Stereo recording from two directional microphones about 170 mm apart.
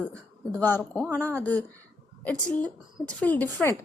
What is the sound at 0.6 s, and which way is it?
A woman's voice, 10° left (ahead or behind).